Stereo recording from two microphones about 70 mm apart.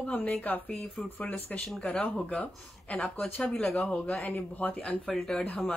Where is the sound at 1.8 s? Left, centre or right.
Left.